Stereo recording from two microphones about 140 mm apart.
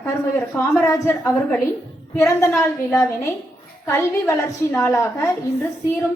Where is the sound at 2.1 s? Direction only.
20° left (ahead or behind).